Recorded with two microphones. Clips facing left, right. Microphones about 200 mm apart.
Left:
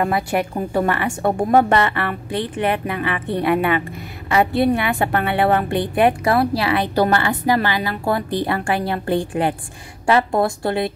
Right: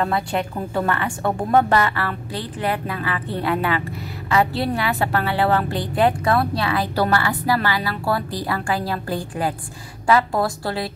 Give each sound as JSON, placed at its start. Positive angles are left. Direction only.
{"t": 0.0, "sound": "a woman's voice", "side_deg": 15}